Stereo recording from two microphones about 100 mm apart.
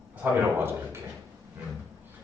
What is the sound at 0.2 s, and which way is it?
Speech, 20° right (ahead or behind).